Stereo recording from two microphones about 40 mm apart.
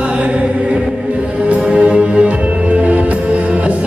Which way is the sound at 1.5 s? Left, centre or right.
Right.